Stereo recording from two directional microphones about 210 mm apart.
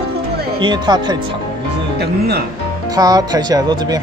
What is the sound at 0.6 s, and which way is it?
Speech, 20° right (ahead or behind).